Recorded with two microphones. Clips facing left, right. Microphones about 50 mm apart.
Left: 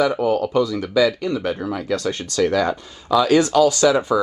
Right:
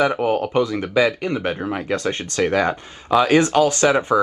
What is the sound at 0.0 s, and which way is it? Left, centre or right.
Speech, right.